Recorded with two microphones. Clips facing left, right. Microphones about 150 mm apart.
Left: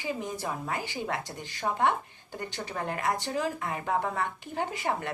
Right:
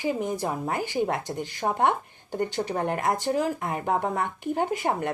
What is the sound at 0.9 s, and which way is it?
Speech, 20° right (ahead or behind).